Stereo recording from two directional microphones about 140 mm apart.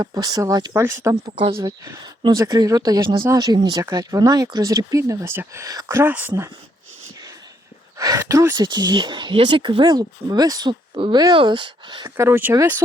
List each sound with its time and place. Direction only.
0.0 s speech: 25° right (ahead or behind)
7.9 s speech: 25° right (ahead or behind)
12.0 s speech: 20° right (ahead or behind)